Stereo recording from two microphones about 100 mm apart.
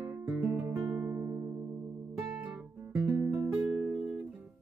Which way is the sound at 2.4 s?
10° right (ahead or behind).